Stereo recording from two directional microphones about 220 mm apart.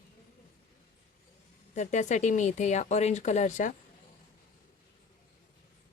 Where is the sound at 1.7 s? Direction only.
35° left (ahead or behind).